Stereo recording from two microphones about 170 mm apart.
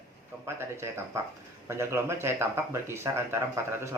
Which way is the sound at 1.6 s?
15° right (ahead or behind).